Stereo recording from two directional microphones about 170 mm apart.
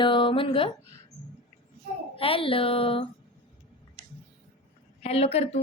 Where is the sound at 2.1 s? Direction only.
35° left (ahead or behind).